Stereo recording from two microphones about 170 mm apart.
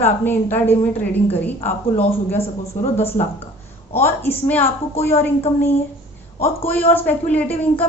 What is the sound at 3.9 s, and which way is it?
A woman's voice, 15° left (ahead or behind).